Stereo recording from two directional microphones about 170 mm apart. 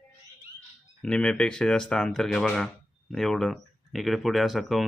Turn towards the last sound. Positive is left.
turn(degrees=0)  # may be behind; listen again after turning